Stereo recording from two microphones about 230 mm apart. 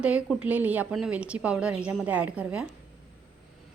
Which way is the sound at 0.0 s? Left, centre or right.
Centre.